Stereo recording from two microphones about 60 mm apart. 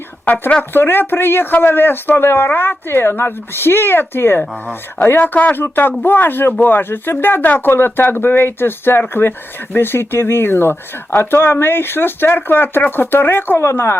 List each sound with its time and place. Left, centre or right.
0.7 s speech: left
5.2 s speech: left
13.6 s speech: left